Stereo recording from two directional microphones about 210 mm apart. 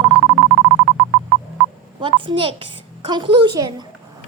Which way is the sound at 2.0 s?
25° right (ahead or behind).